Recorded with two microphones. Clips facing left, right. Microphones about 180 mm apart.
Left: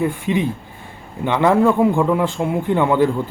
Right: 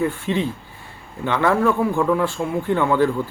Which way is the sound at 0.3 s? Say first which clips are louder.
Left 3 dB; 15° left (ahead or behind).